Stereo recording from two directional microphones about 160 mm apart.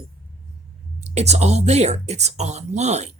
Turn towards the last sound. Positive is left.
turn(degrees=-45)  # may be behind; listen again after turning